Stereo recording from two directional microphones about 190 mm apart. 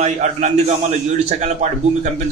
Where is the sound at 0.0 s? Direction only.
35° right (ahead or behind).